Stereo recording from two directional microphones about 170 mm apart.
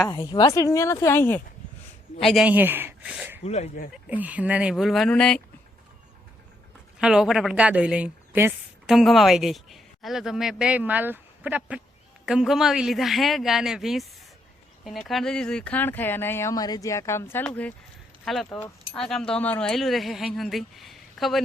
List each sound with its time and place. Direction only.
0.0 s speech: 25° left (ahead or behind)
2.1 s speech: centre (ahead or behind)
2.5 s speech: 10° right (ahead or behind)
3.4 s speech: 40° left (ahead or behind)
3.9 s speech: 10° right (ahead or behind)
7.0 s speech: 5° right (ahead or behind)
9.0 s speech: centre (ahead or behind)